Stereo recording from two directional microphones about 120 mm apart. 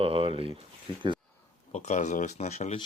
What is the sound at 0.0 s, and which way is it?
Speech, 50° right (ahead or behind).